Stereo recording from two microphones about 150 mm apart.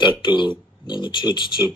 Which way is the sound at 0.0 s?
30° left (ahead or behind).